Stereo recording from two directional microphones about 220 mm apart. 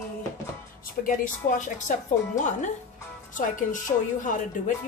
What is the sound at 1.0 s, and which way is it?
Speech, 35° left (ahead or behind).